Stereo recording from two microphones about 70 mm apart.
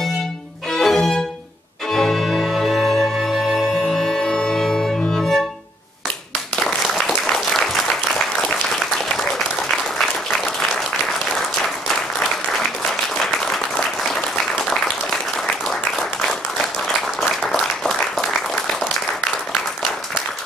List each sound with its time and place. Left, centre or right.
0.7 s violin: centre
1.9 s music: centre
6.6 s applause: centre
11.9 s applause: centre
14.7 s applause: centre